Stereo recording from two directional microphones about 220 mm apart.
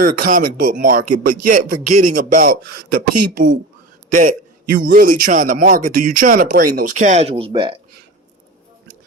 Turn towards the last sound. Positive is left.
turn(degrees=-25)  # may be behind; listen again after turning